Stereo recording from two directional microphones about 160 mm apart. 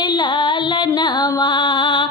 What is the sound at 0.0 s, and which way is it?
Music, 30° left (ahead or behind).